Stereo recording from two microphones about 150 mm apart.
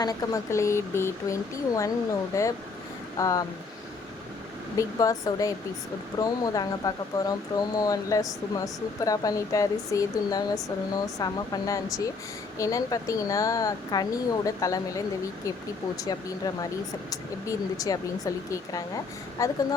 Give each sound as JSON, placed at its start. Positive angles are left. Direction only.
{"t": 0.0, "sound": "speech", "side_deg": 20}
{"t": 4.8, "sound": "speech", "side_deg": 20}
{"t": 17.1, "sound": "speech", "side_deg": 20}